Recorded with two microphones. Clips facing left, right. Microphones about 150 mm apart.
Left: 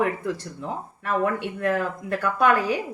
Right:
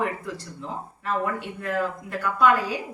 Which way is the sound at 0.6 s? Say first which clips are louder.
Left 3 dB; 55° left (ahead or behind).